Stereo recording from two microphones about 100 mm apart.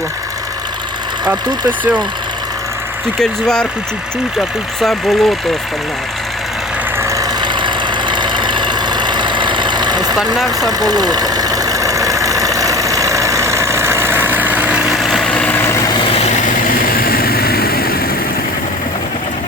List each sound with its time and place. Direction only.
3.2 s speech: 5° left (ahead or behind)
7.0 s vehicle: 30° right (ahead or behind)
7.4 s vehicle: 50° right (ahead or behind)
10.6 s engine: 40° right (ahead or behind); by 14.9 s 10° right (ahead or behind)
14.9 s vehicle: centre (ahead or behind)
15.5 s vehicle: 25° left (ahead or behind)